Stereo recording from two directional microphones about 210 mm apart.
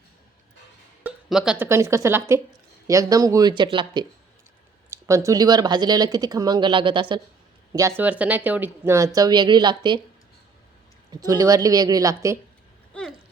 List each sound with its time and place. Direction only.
1.0 s a woman's voice: centre (ahead or behind); by 10.0 s 20° right (ahead or behind)
11.1 s a woman's voice: 15° right (ahead or behind)
12.9 s a sound: 5° left (ahead or behind)